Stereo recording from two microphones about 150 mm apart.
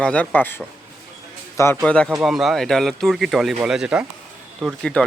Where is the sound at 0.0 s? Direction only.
10° left (ahead or behind).